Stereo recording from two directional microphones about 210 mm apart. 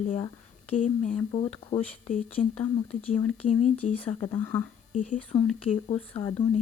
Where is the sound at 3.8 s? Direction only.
35° left (ahead or behind).